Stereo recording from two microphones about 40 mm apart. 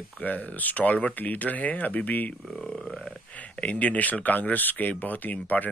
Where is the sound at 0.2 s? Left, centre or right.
Left.